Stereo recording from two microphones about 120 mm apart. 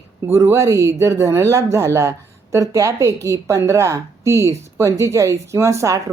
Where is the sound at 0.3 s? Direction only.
20° right (ahead or behind).